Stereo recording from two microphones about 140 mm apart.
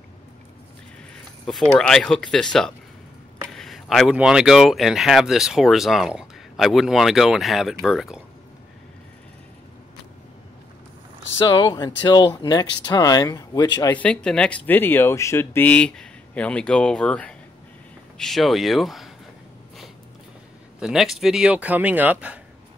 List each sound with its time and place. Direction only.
1.4 s speech: 5° left (ahead or behind)
11.4 s speech: 35° left (ahead or behind)
13.9 s speech: 5° left (ahead or behind)
20.8 s speech: centre (ahead or behind)